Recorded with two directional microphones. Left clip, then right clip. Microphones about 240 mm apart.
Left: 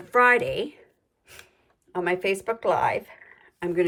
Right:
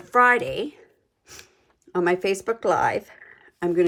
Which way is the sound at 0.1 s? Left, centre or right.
Centre.